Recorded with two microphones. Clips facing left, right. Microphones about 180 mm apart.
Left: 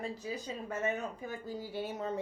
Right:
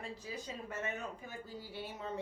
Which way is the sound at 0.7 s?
40° left (ahead or behind).